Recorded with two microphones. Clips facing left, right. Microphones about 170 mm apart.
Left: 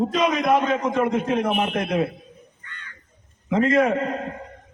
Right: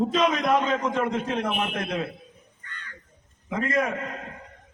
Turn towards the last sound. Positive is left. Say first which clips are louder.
# left 7 dB
turn(degrees=35)  # may be behind; listen again after turning